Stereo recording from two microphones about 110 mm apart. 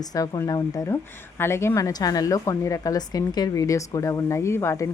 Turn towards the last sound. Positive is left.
turn(degrees=25)  # may be behind; listen again after turning